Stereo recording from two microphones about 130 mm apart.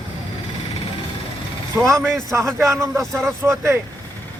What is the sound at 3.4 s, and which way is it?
Speech, 20° right (ahead or behind).